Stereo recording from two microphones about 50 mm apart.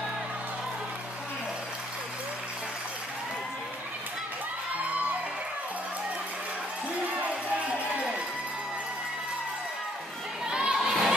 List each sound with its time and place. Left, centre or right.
10.4 s crowd: centre